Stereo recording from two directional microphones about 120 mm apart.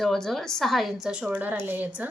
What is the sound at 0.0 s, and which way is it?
A woman's voice, centre (ahead or behind).